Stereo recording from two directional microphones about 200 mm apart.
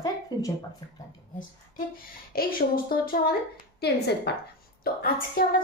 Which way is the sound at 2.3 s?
45° left (ahead or behind).